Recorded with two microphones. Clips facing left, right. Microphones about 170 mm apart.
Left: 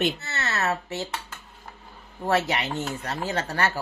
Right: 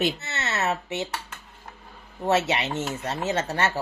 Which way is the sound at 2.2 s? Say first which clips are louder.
Right 1 dB; 25° right (ahead or behind).